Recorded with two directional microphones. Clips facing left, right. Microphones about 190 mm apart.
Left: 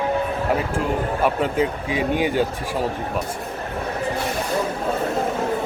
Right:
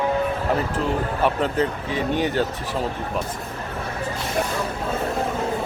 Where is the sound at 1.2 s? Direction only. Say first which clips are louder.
Left 1 dB; 10° left (ahead or behind).